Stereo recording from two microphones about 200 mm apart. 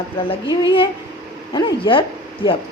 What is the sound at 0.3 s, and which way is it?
A woman's voice, 25° left (ahead or behind).